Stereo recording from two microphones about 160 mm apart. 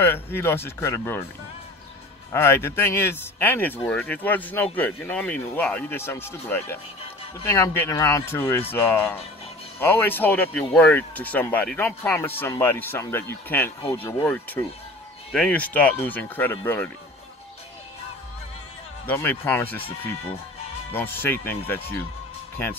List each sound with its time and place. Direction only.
0.0 s speech: 15° left (ahead or behind)
2.3 s speech: 15° left (ahead or behind)
15.3 s speech: 5° left (ahead or behind)
19.0 s speech: 15° left (ahead or behind)
20.9 s speech: 15° left (ahead or behind)